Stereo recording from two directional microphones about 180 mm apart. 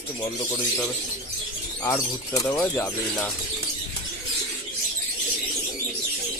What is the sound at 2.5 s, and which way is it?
Speech, 5° left (ahead or behind).